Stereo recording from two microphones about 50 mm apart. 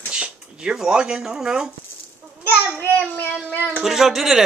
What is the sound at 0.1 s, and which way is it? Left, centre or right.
Speech, centre.